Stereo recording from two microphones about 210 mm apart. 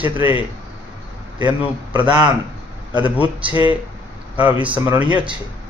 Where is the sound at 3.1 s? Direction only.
5° right (ahead or behind).